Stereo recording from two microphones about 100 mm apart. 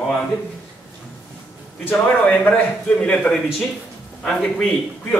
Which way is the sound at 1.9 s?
15° left (ahead or behind).